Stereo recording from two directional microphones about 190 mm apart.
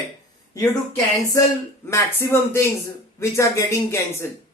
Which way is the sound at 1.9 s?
15° left (ahead or behind).